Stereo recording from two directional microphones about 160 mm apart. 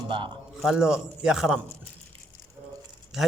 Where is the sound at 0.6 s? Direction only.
Centre (ahead or behind).